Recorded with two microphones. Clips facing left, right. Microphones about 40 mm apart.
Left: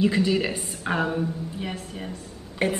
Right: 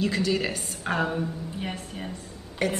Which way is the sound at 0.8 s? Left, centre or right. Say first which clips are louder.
Left 2 dB; centre.